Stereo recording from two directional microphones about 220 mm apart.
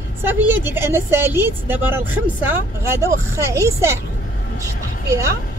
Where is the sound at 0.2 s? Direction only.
10° right (ahead or behind).